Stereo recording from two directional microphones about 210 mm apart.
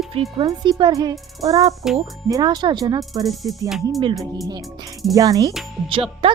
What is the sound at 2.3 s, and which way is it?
Speech, 20° right (ahead or behind).